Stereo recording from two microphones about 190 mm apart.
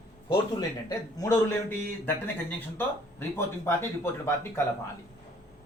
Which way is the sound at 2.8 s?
10° left (ahead or behind).